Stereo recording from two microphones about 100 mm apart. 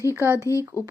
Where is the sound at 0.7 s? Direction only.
30° left (ahead or behind).